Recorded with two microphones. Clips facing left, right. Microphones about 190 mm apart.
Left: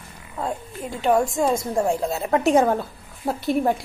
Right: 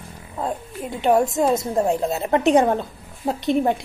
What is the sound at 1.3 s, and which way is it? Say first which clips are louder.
A woman's voice: right 2 dB; centre (ahead or behind).